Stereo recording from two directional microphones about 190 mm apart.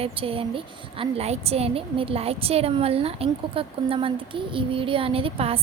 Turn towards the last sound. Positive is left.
turn(degrees=-30)  # may be behind; listen again after turning